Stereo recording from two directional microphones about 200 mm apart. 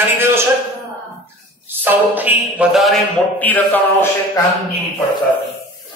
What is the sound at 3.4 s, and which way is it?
Speech, 10° left (ahead or behind).